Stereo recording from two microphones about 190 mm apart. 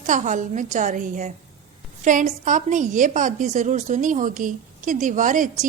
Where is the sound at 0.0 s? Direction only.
40° right (ahead or behind).